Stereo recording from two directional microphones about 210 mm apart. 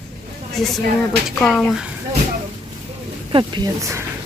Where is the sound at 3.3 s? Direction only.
20° right (ahead or behind).